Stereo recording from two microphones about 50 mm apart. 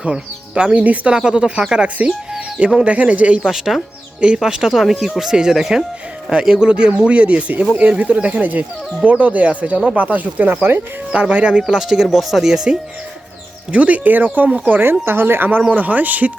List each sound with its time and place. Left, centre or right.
0.0 s speech: centre
2.6 s speech: centre
2.8 s speech: right
3.4 s speech: centre; by 10.8 s right
11.1 s speech: right
11.7 s speech: centre
13.7 s speech: right
15.0 s speech: right